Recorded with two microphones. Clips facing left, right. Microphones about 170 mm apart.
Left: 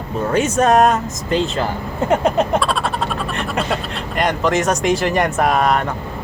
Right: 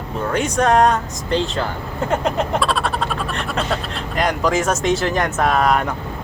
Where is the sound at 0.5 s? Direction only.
20° left (ahead or behind).